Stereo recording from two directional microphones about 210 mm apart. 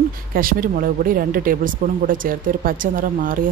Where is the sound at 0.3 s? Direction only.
45° right (ahead or behind).